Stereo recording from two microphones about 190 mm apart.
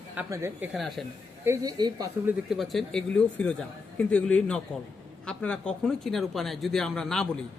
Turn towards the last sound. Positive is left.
turn(degrees=5)  # may be behind; listen again after turning